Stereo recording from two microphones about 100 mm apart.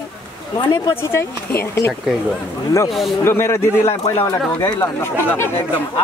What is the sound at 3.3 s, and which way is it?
Speech, 25° left (ahead or behind).